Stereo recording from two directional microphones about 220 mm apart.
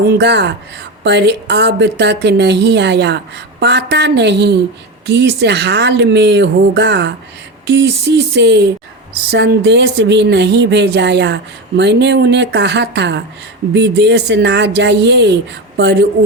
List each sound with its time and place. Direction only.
0.1 s a woman's voice: 50° right (ahead or behind)